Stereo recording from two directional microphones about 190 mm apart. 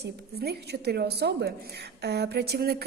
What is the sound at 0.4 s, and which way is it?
A woman's voice, 55° right (ahead or behind).